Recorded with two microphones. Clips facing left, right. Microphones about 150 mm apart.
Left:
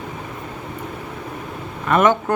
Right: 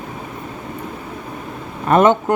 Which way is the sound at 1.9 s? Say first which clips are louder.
Right 3 dB; 35° right (ahead or behind).